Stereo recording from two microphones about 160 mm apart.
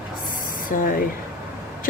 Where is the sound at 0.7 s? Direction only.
60° left (ahead or behind).